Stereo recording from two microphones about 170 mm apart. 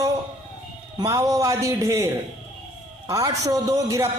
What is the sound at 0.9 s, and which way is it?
A man's voice, 20° right (ahead or behind).